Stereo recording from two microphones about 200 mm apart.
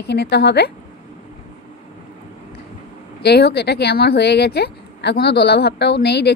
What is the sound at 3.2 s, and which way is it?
Speech, 55° left (ahead or behind).